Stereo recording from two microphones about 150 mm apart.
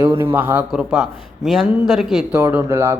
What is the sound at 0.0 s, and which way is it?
A man's voice, 15° right (ahead or behind).